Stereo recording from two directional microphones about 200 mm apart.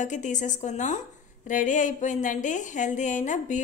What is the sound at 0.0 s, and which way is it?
A woman's voice, 40° left (ahead or behind).